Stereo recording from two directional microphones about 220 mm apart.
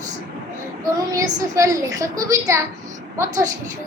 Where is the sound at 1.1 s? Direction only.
15° right (ahead or behind).